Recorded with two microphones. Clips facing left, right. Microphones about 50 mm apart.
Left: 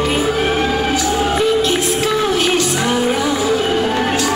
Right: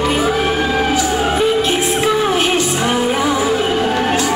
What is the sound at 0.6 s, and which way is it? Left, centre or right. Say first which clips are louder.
Music: right 1 dB; right.